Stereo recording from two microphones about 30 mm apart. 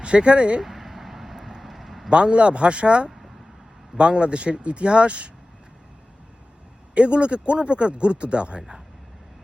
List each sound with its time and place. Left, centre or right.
0.0 s speech: right
0.6 s vehicle: centre
2.0 s speech: right
3.1 s a sound: centre
3.9 s speech: right
6.9 s speech: right